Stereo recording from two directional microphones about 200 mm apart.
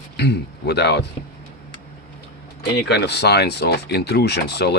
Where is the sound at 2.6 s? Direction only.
55° left (ahead or behind).